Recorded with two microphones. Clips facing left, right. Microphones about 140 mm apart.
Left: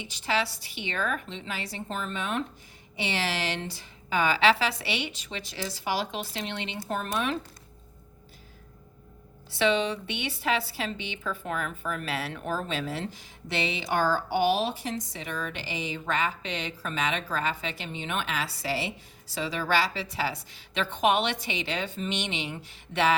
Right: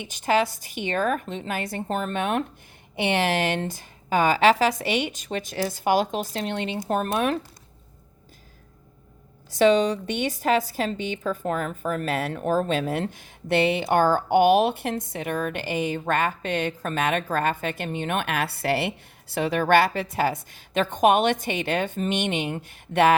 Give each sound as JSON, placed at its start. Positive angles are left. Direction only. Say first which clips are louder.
{"t": 0.0, "sound": "a woman's voice", "louder": "right 7 dB", "side_deg": -50}
{"t": 9.5, "sound": "a woman's voice", "louder": "right 7 dB", "side_deg": -45}